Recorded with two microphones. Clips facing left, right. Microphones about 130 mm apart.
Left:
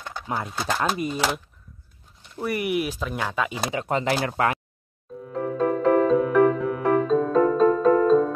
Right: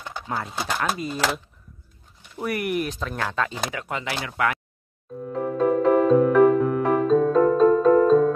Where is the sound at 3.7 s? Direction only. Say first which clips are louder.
Left 6 dB; 30° left (ahead or behind).